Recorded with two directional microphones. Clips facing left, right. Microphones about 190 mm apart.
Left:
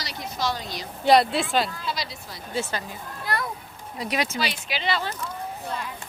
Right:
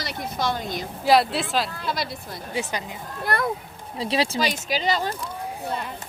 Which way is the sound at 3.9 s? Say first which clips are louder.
Right 3 dB; 30° right (ahead or behind).